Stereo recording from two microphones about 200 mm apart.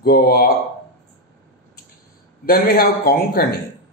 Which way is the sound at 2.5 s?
45° left (ahead or behind).